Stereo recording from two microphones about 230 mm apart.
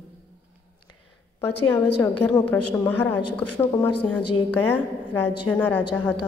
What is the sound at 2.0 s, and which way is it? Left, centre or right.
A woman's voice, centre.